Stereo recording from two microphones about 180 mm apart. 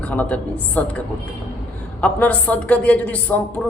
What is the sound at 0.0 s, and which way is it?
Speech, 10° left (ahead or behind).